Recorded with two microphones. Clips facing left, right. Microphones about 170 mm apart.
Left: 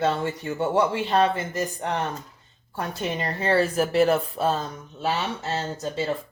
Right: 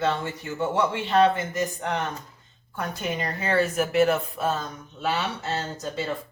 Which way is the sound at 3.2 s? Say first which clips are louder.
Left 2 dB; 30° left (ahead or behind).